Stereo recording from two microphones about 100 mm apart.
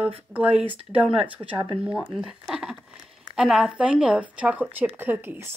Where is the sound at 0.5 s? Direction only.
65° right (ahead or behind).